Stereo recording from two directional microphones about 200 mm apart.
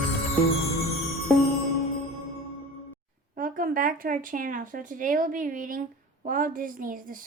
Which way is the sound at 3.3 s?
45° right (ahead or behind).